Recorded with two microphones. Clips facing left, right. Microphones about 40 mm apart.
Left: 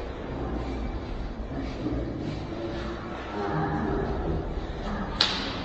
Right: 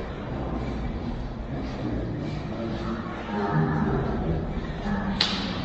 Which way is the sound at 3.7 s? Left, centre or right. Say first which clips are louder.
Right 2 dB; right.